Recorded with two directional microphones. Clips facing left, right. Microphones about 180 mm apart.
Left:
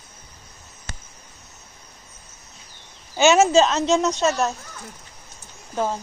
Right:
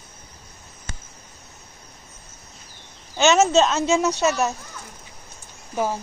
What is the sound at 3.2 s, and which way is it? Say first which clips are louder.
Speech: left 1 dB; centre (ahead or behind).